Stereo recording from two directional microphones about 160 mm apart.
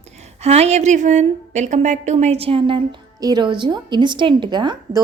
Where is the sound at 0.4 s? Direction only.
45° right (ahead or behind).